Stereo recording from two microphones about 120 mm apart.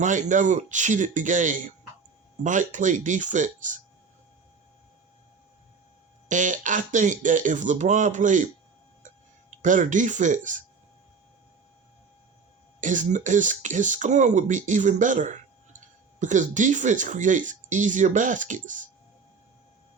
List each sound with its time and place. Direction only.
0.0 s speech: 90° right
6.2 s speech: 90° right
9.6 s speech: 90° right
12.8 s speech: 90° right